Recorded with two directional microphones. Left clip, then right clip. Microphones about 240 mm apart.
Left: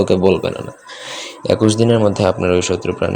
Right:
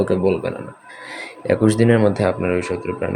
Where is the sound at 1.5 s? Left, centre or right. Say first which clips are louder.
Left 2 dB; centre.